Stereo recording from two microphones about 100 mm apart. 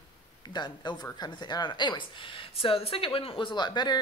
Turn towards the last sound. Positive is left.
turn(degrees=45)  # may be behind; listen again after turning